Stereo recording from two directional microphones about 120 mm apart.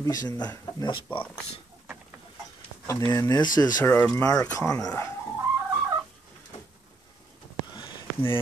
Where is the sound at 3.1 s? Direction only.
30° left (ahead or behind).